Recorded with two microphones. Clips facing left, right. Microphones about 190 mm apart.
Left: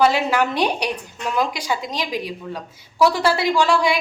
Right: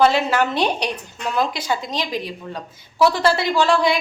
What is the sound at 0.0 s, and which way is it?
A woman's voice, 10° left (ahead or behind).